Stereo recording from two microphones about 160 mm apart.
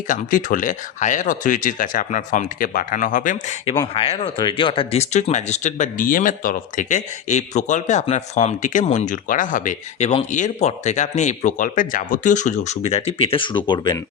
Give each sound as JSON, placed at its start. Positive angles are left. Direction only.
{"t": 0.1, "sound": "speech", "side_deg": 55}
{"t": 3.9, "sound": "speech", "side_deg": 35}